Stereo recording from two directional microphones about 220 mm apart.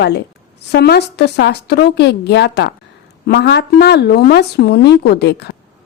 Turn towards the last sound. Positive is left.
turn(degrees=50)  # may be behind; listen again after turning